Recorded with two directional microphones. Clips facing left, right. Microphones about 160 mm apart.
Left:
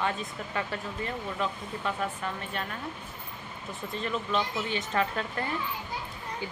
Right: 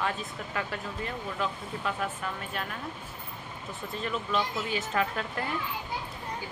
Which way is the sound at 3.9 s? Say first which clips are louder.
Left 1 dB; centre (ahead or behind).